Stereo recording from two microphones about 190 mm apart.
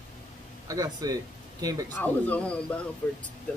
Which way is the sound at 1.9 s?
10° left (ahead or behind).